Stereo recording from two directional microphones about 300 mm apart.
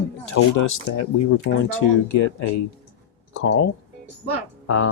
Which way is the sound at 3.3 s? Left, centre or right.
Left.